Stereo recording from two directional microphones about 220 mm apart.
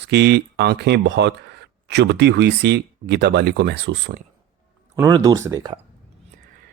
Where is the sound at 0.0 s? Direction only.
50° right (ahead or behind).